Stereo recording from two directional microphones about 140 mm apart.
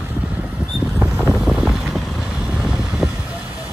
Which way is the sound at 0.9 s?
5° left (ahead or behind).